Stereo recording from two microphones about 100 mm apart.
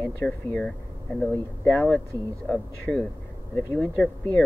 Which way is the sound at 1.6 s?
20° left (ahead or behind).